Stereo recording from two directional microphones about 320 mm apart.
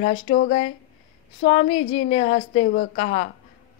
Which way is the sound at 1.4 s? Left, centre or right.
Centre.